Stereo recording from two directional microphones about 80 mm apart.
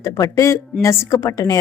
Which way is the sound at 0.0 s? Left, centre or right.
Left.